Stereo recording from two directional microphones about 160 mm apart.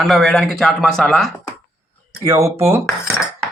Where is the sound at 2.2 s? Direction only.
20° right (ahead or behind).